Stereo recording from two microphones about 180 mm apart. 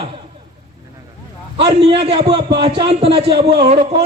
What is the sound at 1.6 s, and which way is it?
A man's voice, 30° right (ahead or behind).